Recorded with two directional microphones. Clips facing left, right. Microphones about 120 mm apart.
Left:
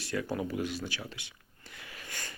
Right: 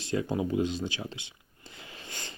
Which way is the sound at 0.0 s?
25° right (ahead or behind).